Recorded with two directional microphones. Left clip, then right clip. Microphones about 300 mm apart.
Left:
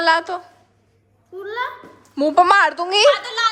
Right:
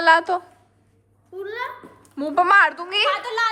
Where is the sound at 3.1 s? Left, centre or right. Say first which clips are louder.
Left 2 dB; right.